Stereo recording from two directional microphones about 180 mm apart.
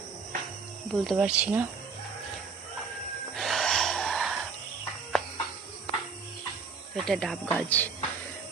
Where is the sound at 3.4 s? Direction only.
Centre (ahead or behind).